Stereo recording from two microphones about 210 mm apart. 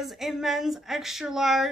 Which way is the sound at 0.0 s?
Centre (ahead or behind).